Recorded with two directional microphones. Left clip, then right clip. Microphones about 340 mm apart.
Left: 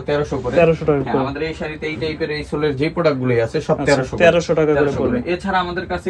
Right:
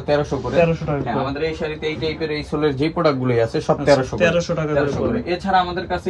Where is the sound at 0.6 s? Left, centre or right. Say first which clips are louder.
Left 4 dB; left.